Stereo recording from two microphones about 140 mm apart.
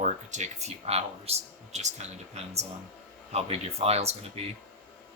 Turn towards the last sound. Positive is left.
turn(degrees=-50)  # may be behind; listen again after turning